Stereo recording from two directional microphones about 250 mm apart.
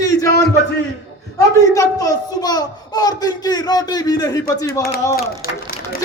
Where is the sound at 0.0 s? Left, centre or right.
Centre.